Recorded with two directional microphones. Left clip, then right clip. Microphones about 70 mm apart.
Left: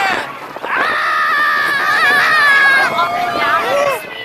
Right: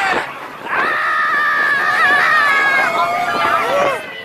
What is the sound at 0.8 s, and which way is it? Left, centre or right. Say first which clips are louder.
Screaming: left 1 dB; left.